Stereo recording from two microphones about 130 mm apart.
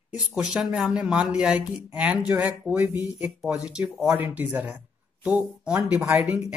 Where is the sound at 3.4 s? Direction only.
5° right (ahead or behind).